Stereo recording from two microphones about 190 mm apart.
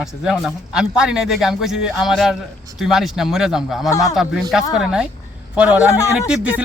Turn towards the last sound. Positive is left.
turn(degrees=-5)  # may be behind; listen again after turning